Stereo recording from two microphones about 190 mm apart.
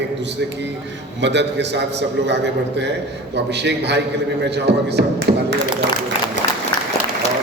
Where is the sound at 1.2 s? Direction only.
65° right (ahead or behind).